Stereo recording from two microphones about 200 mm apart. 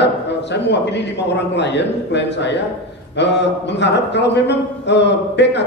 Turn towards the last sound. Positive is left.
turn(degrees=60)  # may be behind; listen again after turning